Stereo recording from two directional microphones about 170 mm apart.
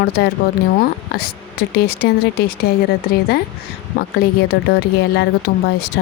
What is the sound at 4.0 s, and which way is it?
Speech, 70° left (ahead or behind).